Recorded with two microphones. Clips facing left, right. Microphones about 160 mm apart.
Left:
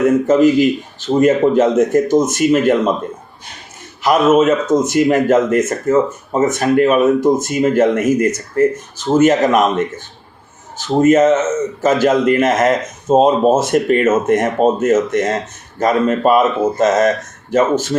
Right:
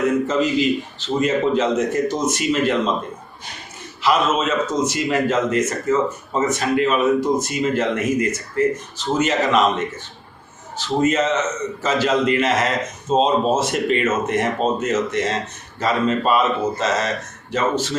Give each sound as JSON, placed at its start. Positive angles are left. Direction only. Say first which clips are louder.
{"t": 0.3, "sound": "speech", "louder": "left 8 dB", "side_deg": 50}
{"t": 4.0, "sound": "speech", "louder": "left 7 dB", "side_deg": 50}
{"t": 11.0, "sound": "speech", "louder": "left 9 dB", "side_deg": 50}